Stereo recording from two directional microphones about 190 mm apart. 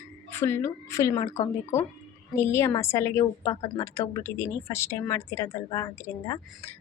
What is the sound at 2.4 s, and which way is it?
A woman's voice, 15° left (ahead or behind).